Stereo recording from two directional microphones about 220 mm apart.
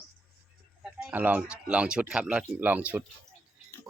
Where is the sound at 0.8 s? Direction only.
5° right (ahead or behind).